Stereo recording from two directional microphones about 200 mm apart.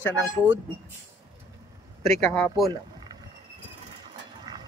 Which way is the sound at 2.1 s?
10° left (ahead or behind).